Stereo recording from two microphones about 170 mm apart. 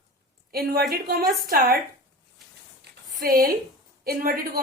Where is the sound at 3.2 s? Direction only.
55° right (ahead or behind).